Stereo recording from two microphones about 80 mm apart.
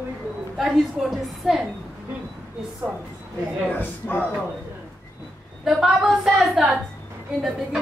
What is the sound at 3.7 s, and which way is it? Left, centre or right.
Speech, left.